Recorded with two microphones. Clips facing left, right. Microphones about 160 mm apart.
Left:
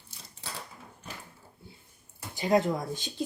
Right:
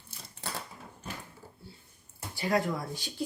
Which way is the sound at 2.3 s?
20° left (ahead or behind).